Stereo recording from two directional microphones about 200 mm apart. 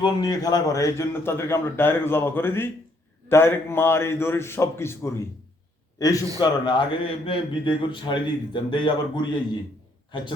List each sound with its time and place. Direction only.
0.0 s a man's voice: 20° left (ahead or behind)